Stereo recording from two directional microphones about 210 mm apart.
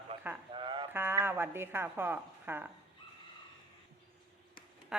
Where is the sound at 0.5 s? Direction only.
20° right (ahead or behind).